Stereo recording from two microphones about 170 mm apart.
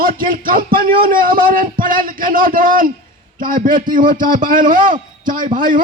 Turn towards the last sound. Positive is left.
turn(degrees=-55)  # may be behind; listen again after turning